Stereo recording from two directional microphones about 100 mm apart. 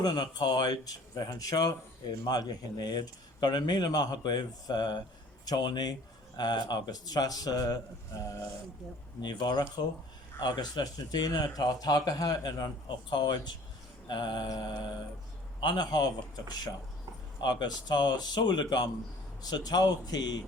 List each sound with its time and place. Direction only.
0.0 s speech: 45° left (ahead or behind)
9.2 s speech: 45° left (ahead or behind)